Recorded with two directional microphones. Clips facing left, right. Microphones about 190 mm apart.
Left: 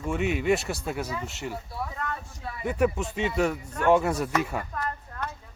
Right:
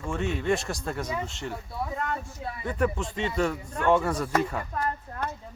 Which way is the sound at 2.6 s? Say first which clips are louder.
Left 3 dB; 10° left (ahead or behind).